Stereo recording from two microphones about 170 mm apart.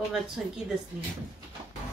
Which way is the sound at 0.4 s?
5° right (ahead or behind).